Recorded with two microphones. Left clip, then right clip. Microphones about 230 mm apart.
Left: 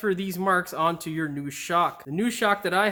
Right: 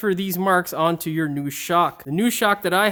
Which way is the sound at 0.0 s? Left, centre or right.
Right.